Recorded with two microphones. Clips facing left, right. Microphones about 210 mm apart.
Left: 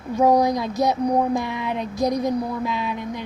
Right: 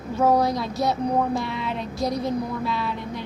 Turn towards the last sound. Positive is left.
turn(degrees=15)  # may be behind; listen again after turning